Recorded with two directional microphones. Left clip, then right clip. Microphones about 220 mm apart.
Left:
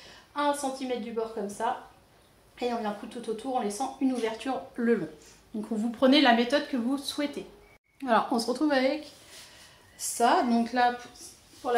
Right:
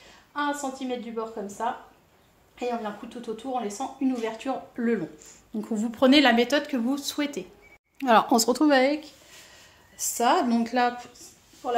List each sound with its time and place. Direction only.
0.3 s speech: 20° right (ahead or behind)
5.6 s speech: 50° right (ahead or behind)
9.9 s speech: 50° right (ahead or behind)
11.6 s a woman's voice: 15° right (ahead or behind)